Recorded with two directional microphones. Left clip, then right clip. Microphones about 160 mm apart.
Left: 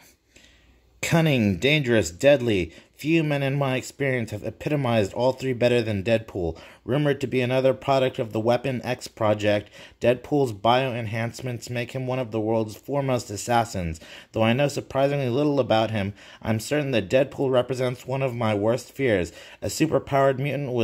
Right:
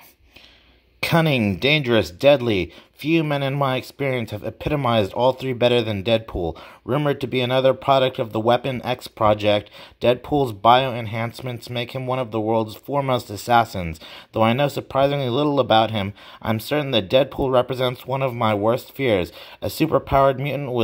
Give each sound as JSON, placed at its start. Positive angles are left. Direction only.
{"t": 1.0, "sound": "speech", "side_deg": -5}